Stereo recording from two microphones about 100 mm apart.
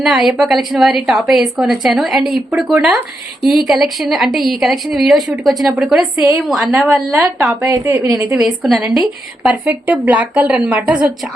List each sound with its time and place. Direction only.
0.0 s a woman's voice: 5° right (ahead or behind)
7.6 s a woman's voice: 30° right (ahead or behind)
8.3 s a woman's voice: 5° right (ahead or behind)
9.5 s speech: 15° right (ahead or behind)